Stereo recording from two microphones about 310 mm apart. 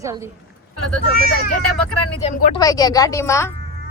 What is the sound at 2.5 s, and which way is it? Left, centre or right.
Speech, centre.